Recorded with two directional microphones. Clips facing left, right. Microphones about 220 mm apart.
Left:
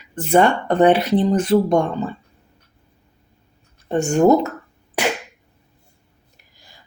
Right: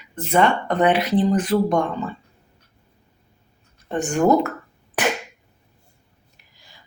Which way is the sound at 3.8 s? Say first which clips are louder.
Left 4 dB; 25° left (ahead or behind).